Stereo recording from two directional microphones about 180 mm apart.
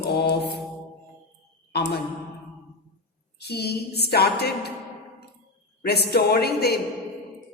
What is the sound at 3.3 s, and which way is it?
Speech, 65° left (ahead or behind).